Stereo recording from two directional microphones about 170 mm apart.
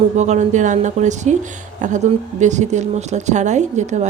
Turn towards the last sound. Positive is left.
turn(degrees=-45)  # may be behind; listen again after turning